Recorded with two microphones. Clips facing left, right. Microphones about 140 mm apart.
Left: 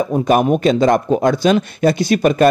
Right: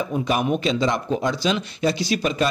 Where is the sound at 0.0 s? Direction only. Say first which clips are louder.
Left 8 dB; 45° left (ahead or behind).